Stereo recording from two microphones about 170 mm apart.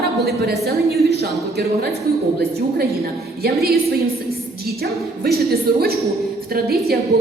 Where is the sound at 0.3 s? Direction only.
65° right (ahead or behind).